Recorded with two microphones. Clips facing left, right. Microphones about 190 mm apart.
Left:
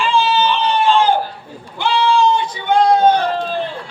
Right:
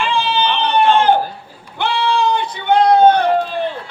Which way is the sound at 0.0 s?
60° right (ahead or behind).